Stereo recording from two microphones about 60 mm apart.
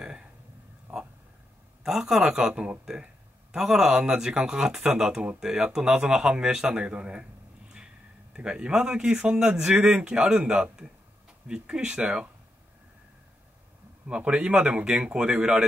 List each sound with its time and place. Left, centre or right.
0.0 s a sound: centre
1.8 s a man's voice: centre
8.4 s a man's voice: centre
14.0 s a man's voice: centre